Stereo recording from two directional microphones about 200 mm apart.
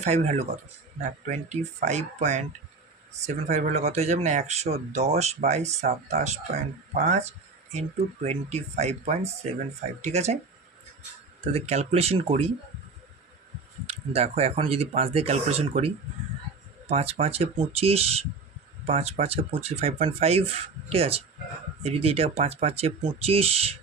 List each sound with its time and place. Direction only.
0.0 s speech: 35° right (ahead or behind)
11.3 s speech: 30° right (ahead or behind)
13.8 s speech: 30° right (ahead or behind)
16.9 s speech: 30° right (ahead or behind)